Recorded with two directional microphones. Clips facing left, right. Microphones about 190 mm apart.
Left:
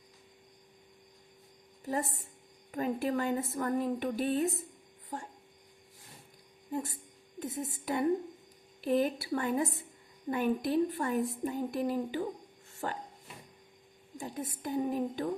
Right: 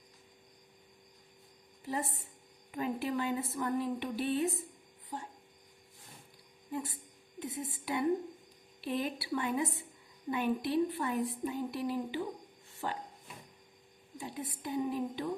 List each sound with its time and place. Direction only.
1.8 s a woman's voice: 45° left (ahead or behind)
6.7 s a woman's voice: 45° left (ahead or behind)
12.7 s a sound: 45° left (ahead or behind)
14.2 s a woman's voice: 45° left (ahead or behind)